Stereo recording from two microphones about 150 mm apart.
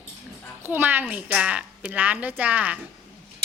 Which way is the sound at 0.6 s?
15° right (ahead or behind).